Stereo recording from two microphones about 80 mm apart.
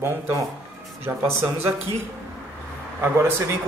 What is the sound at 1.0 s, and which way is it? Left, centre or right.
A man's voice, right.